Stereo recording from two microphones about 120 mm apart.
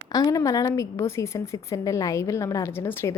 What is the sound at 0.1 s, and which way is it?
A woman's voice, 30° left (ahead or behind).